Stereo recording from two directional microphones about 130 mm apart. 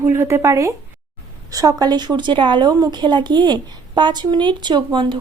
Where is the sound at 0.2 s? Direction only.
20° right (ahead or behind).